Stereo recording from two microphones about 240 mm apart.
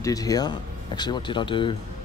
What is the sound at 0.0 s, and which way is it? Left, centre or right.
Speech, centre.